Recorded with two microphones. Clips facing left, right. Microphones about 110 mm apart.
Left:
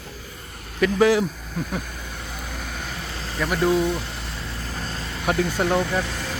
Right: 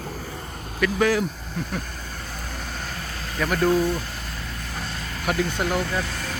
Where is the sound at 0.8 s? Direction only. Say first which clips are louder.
Left 3 dB; 25° left (ahead or behind).